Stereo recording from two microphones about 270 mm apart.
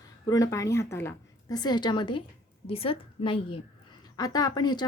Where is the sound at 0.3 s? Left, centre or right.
Centre.